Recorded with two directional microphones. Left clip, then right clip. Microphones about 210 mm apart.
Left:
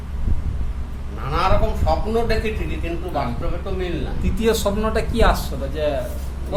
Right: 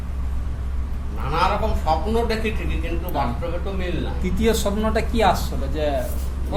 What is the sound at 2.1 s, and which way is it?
A man's voice, 15° left (ahead or behind).